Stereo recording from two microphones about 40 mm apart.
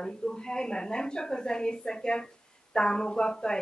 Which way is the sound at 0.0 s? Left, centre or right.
Centre.